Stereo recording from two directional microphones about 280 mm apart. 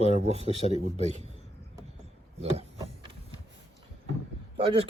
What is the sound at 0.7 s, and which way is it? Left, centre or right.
Speech, right.